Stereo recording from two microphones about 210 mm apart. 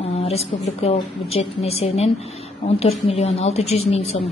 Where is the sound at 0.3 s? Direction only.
30° left (ahead or behind).